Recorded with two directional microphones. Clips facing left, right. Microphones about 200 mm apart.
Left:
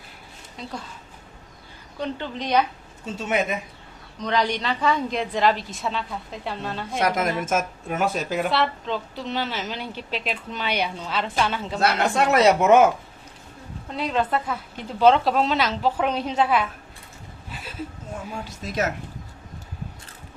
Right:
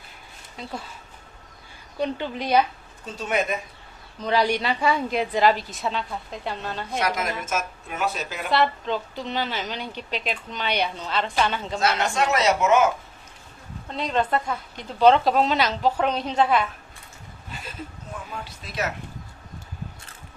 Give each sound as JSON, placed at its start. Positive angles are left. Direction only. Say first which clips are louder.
{"t": 0.5, "sound": "a woman's voice", "louder": "even", "side_deg": -5}
{"t": 2.0, "sound": "a woman's voice", "louder": "right 2 dB", "side_deg": -15}
{"t": 3.2, "sound": "speech", "louder": "left 1 dB", "side_deg": 25}
{"t": 4.2, "sound": "a woman's voice", "louder": "right 2 dB", "side_deg": -10}
{"t": 7.0, "sound": "speech", "louder": "left 5 dB", "side_deg": 50}
{"t": 8.4, "sound": "a woman's voice", "louder": "right 1 dB", "side_deg": 0}
{"t": 12.1, "sound": "speech", "louder": "left 4 dB", "side_deg": 55}
{"t": 13.9, "sound": "a woman's voice", "louder": "even", "side_deg": 5}
{"t": 17.5, "sound": "a sound", "louder": "even", "side_deg": 5}
{"t": 18.3, "sound": "speech", "louder": "left 4 dB", "side_deg": 45}